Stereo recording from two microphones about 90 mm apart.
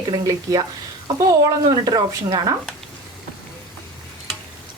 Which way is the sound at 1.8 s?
45° right (ahead or behind).